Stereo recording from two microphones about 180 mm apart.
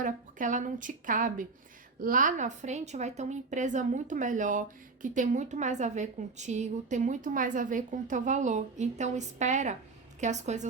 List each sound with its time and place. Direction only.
0.0 s a woman's voice: 45° right (ahead or behind)